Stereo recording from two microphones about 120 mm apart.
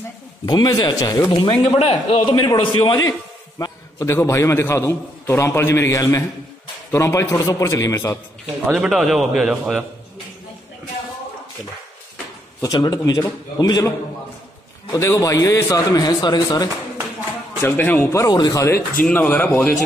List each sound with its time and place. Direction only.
0.5 s speech: 35° left (ahead or behind)
1.6 s speech: 60° left (ahead or behind)
2.2 s a man's voice: 45° left (ahead or behind)
3.0 s a man's voice: 30° left (ahead or behind)
8.7 s a man's voice: 5° right (ahead or behind)
12.6 s a man's voice: 35° left (ahead or behind)
17.6 s speech: 15° left (ahead or behind)
18.1 s a man's voice: 30° left (ahead or behind)
19.0 s speech: 15° left (ahead or behind)